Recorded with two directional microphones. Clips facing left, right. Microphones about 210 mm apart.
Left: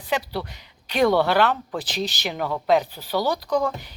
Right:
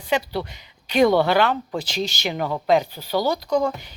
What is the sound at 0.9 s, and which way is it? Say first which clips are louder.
Speech: right 2 dB; centre (ahead or behind).